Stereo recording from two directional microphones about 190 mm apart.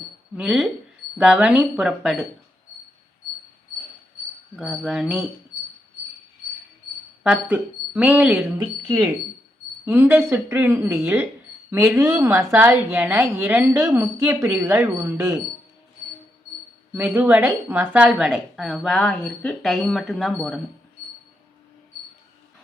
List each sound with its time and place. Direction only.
0.3 s a woman's voice: 5° right (ahead or behind)
4.5 s a woman's voice: centre (ahead or behind)
7.3 s a woman's voice: 5° right (ahead or behind)
8.5 s a woman's voice: 20° right (ahead or behind)
16.9 s a woman's voice: 10° right (ahead or behind)